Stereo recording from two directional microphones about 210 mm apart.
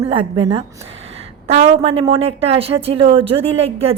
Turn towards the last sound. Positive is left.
turn(degrees=-30)  # may be behind; listen again after turning